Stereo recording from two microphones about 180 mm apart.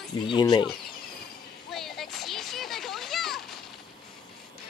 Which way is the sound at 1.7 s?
Centre (ahead or behind).